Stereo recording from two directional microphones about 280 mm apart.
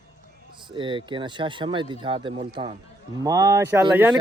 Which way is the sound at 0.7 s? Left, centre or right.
Centre.